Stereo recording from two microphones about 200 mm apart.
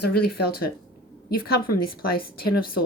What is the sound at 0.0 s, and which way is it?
Speech, 50° left (ahead or behind).